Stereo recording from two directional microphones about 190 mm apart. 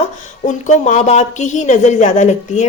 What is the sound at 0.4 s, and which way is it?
A woman's voice, 35° left (ahead or behind).